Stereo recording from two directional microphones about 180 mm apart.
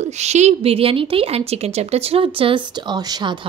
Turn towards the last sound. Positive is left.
turn(degrees=-25)  # may be behind; listen again after turning